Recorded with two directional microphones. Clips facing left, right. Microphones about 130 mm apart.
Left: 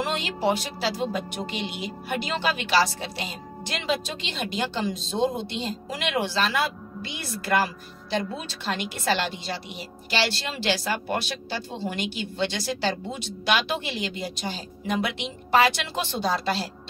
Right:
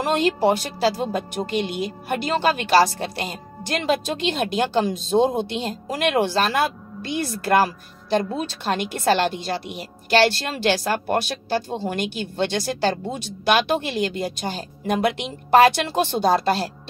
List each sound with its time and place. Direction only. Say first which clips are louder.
0.0 s a woman's voice: right 7 dB; 45° right (ahead or behind)